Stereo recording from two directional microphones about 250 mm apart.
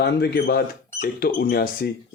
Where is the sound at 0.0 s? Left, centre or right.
Left.